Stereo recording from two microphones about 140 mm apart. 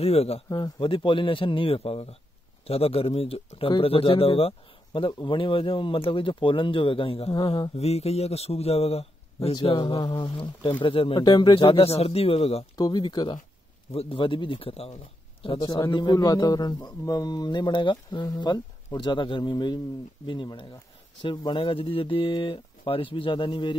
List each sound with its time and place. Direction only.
0.0 s speech: 45° left (ahead or behind)
0.5 s speech: 35° left (ahead or behind)
7.3 s speech: 35° left (ahead or behind)
9.6 s speech: 35° left (ahead or behind)
12.7 s speech: 30° left (ahead or behind)
15.4 s speech: 35° left (ahead or behind)